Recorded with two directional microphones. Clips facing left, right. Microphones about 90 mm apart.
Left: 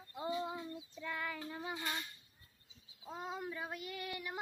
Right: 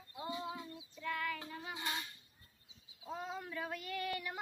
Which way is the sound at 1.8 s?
15° right (ahead or behind).